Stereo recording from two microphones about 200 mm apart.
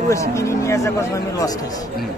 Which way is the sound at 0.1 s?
15° left (ahead or behind).